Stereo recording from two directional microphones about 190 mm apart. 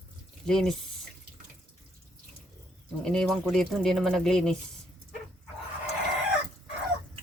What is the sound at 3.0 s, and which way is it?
Speech, 5° left (ahead or behind).